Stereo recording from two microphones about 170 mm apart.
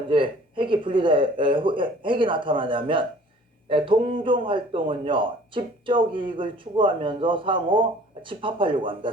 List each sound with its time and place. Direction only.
0.1 s speech: 30° right (ahead or behind)